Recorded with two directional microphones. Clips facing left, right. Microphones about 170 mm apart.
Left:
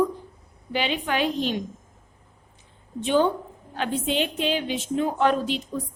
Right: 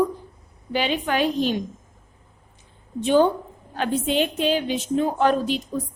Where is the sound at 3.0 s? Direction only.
40° right (ahead or behind).